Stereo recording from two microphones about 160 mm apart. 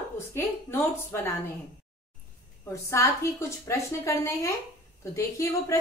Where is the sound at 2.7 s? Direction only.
20° left (ahead or behind).